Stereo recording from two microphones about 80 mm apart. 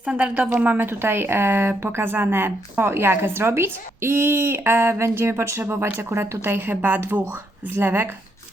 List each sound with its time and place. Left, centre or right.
0.0 s speech: centre